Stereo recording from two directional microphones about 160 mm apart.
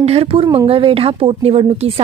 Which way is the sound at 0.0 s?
40° right (ahead or behind).